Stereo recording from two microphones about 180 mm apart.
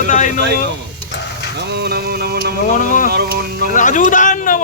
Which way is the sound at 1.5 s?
65° right (ahead or behind).